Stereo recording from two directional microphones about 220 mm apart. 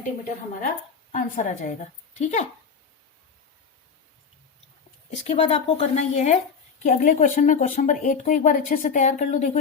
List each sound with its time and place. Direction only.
1.1 s speech: 35° left (ahead or behind)
5.1 s speech: 30° left (ahead or behind)